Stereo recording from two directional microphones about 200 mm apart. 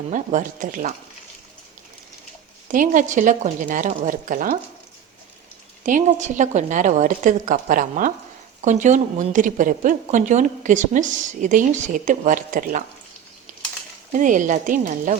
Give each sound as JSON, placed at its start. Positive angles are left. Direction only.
{"t": 0.1, "sound": "a woman's voice", "side_deg": -40}
{"t": 2.7, "sound": "a woman's voice", "side_deg": -40}
{"t": 5.8, "sound": "a woman's voice", "side_deg": -40}
{"t": 13.5, "sound": "a sound", "side_deg": -40}
{"t": 14.1, "sound": "a woman's voice", "side_deg": -40}